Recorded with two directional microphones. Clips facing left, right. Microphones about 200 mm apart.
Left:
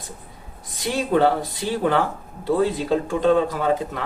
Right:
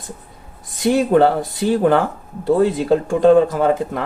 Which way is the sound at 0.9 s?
50° right (ahead or behind).